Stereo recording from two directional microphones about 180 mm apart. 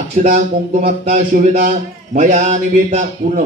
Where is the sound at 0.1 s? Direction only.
45° right (ahead or behind).